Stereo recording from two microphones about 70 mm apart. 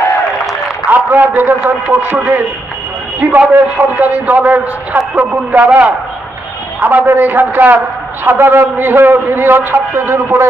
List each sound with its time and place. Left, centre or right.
0.8 s a man's voice: right